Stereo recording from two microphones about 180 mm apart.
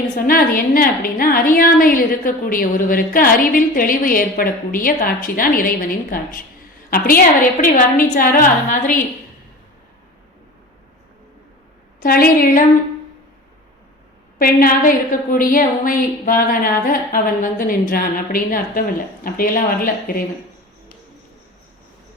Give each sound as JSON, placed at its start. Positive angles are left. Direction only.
{"t": 0.2, "sound": "a woman's voice", "side_deg": 55}
{"t": 7.6, "sound": "a woman's voice", "side_deg": 50}
{"t": 12.0, "sound": "a woman's voice", "side_deg": 55}
{"t": 14.3, "sound": "a woman's voice", "side_deg": 50}